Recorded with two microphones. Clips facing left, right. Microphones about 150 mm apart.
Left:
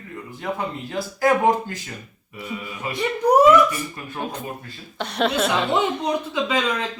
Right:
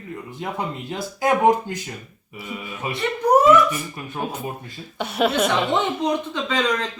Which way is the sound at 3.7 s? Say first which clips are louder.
Right 1 dB; 15° right (ahead or behind).